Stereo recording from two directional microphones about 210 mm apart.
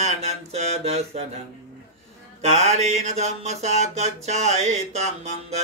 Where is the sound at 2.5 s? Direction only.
35° right (ahead or behind).